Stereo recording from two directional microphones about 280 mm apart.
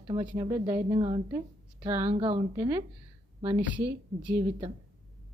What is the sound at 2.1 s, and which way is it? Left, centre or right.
A woman's voice, centre.